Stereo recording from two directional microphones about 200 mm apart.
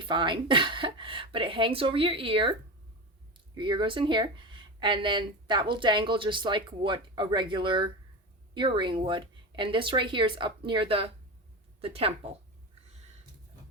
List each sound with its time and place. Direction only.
0.0 s speech: 25° right (ahead or behind)